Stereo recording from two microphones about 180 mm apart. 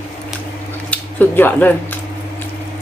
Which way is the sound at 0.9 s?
10° left (ahead or behind).